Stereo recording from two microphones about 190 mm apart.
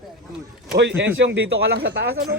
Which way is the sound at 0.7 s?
65° right (ahead or behind).